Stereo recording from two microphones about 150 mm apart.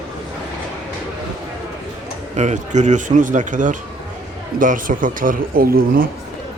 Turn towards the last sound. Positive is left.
turn(degrees=-75)  # may be behind; listen again after turning